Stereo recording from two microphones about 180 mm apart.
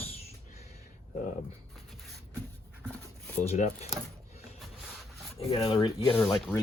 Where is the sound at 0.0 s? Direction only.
35° left (ahead or behind).